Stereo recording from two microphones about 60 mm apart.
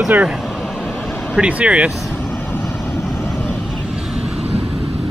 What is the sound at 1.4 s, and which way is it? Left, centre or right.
Speech, right.